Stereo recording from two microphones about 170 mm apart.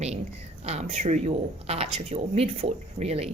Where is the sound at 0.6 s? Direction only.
40° right (ahead or behind).